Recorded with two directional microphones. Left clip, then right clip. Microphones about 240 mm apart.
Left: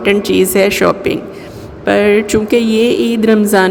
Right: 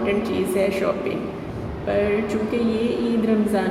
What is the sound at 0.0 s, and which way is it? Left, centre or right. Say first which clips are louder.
Speech: left 11 dB; left.